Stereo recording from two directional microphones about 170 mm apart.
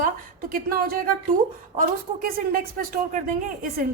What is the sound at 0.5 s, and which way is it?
Speech, 60° right (ahead or behind).